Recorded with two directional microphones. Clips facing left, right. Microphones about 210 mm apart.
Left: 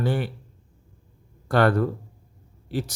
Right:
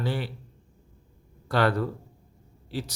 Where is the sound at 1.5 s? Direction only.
50° left (ahead or behind).